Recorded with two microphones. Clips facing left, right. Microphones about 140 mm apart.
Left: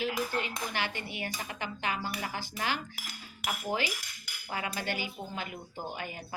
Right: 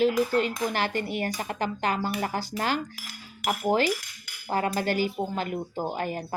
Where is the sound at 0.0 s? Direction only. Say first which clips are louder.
Right 10 dB; 40° right (ahead or behind).